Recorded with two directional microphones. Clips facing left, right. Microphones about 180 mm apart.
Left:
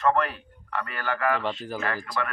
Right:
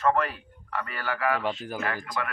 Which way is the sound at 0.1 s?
5° right (ahead or behind).